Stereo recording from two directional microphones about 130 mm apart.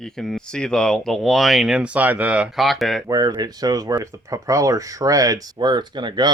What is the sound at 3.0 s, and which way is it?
Speech, 30° right (ahead or behind).